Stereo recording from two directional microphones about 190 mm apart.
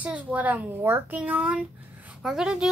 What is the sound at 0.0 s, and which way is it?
A child's voice, 5° right (ahead or behind).